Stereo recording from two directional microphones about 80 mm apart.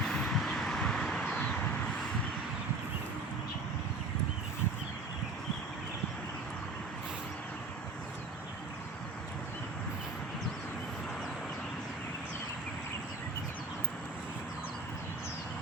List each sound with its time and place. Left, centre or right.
0.0 s vehicle: centre